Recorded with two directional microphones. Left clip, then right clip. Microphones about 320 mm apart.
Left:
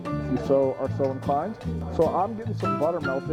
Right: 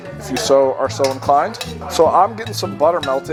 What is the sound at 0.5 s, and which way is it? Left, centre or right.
Speech, centre.